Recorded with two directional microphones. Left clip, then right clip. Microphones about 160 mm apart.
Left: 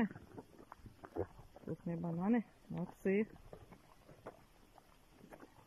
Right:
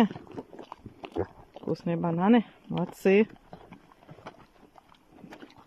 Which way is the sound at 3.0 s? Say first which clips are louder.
Right 14 dB; 25° right (ahead or behind).